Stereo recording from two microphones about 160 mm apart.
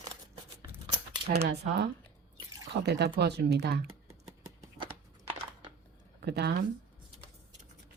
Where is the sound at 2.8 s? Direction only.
90° right.